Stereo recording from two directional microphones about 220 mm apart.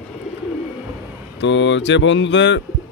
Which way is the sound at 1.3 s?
55° left (ahead or behind).